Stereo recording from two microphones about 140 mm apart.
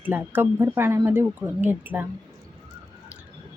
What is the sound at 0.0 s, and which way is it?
Speech, 15° right (ahead or behind).